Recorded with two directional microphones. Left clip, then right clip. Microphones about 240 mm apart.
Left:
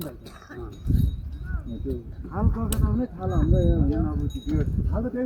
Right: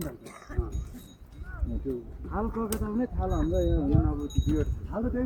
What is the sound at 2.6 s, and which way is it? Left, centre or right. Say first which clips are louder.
Speech: left 1 dB; left.